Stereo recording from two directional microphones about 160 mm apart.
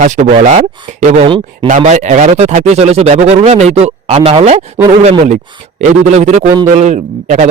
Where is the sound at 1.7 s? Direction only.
50° right (ahead or behind).